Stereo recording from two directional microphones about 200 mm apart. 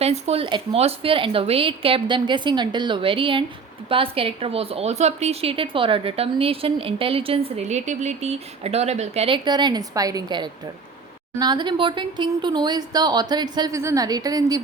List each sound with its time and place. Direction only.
0.0 s a woman's voice: 30° right (ahead or behind)